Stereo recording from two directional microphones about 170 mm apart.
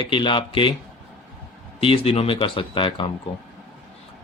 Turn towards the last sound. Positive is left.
turn(degrees=30)  # may be behind; listen again after turning